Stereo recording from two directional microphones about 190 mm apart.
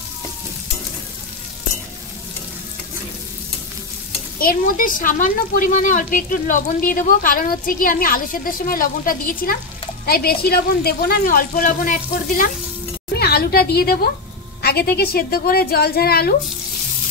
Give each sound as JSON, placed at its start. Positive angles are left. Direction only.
{"t": 4.4, "sound": "a woman's voice", "side_deg": 45}